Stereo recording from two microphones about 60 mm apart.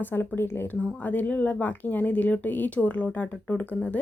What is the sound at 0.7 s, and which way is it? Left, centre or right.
Speech, left.